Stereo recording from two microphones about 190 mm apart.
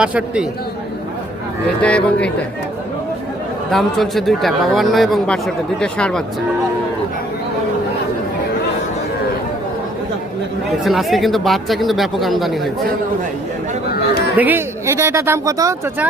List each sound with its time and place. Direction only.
0.0 s speech: 5° right (ahead or behind)
1.8 s speech: 5° left (ahead or behind)
3.7 s speech: centre (ahead or behind)
10.8 s speech: centre (ahead or behind)
14.3 s speech: 10° right (ahead or behind)